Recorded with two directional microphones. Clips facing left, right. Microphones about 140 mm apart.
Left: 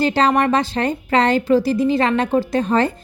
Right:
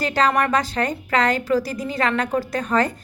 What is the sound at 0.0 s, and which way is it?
A woman's voice, 30° left (ahead or behind).